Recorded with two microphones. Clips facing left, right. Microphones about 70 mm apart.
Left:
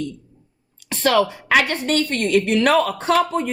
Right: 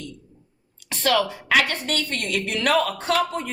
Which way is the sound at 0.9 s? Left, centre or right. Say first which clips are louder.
Left 4 dB; left.